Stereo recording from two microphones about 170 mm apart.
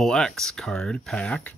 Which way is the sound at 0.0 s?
5° left (ahead or behind).